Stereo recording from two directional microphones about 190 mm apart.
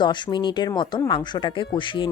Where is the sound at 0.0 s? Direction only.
25° left (ahead or behind).